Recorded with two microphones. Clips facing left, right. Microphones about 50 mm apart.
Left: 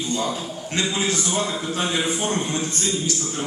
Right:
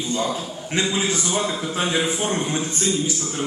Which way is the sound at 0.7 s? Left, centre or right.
Centre.